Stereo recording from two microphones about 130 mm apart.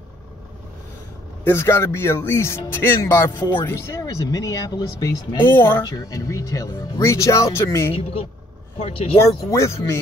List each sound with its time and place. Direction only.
1.4 s speech: 20° left (ahead or behind)
8.7 s speech: 50° left (ahead or behind)
9.5 s speech: 20° left (ahead or behind)